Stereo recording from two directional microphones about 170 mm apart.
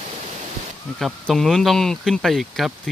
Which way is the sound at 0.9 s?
Centre (ahead or behind).